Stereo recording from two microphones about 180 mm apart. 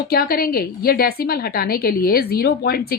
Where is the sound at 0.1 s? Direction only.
55° left (ahead or behind).